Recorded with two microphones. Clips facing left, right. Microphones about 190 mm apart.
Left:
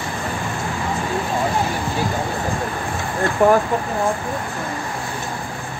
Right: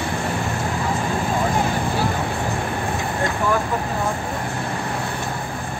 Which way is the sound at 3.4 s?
65° left (ahead or behind).